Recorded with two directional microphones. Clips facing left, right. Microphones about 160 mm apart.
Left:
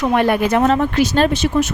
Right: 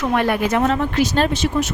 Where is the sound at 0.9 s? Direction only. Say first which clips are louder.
Left 3 dB; 60° left (ahead or behind).